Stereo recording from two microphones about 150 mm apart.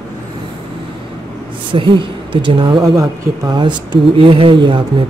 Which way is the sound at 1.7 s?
35° right (ahead or behind).